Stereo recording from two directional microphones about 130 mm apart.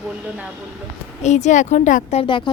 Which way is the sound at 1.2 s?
65° left (ahead or behind).